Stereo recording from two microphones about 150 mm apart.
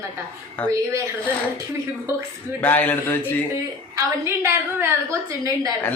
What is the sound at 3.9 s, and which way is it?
A woman's voice, 15° right (ahead or behind).